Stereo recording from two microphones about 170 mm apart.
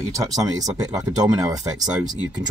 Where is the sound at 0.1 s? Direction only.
20° right (ahead or behind).